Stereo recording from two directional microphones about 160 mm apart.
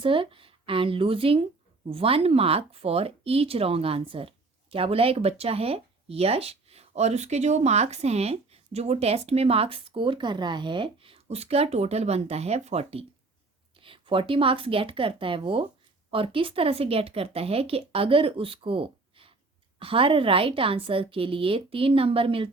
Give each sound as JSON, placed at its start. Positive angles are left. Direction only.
{"t": 0.0, "sound": "speech", "side_deg": -35}